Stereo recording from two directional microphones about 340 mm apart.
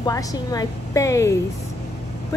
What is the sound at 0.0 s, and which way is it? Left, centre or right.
A woman's voice, centre.